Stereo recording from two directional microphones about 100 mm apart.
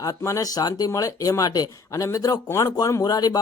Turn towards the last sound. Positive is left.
turn(degrees=40)  # may be behind; listen again after turning